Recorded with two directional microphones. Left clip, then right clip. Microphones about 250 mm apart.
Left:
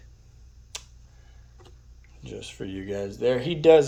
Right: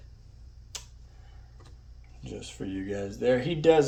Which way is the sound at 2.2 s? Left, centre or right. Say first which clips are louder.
Left 2 dB; centre.